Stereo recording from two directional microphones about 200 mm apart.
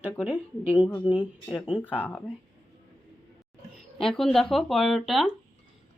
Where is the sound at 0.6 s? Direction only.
30° left (ahead or behind).